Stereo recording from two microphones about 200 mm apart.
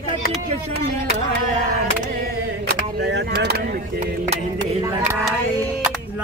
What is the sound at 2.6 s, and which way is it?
Speech, 55° right (ahead or behind).